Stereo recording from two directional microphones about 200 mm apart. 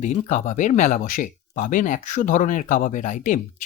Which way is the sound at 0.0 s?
35° left (ahead or behind).